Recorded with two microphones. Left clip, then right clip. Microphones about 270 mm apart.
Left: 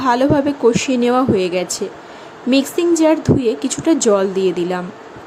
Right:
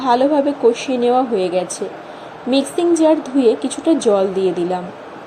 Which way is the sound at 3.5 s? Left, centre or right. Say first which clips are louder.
Even; centre.